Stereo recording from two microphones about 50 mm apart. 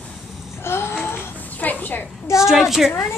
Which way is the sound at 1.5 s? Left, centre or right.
Left.